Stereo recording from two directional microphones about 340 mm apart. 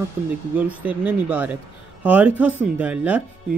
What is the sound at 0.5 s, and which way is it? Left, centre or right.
Speech, centre.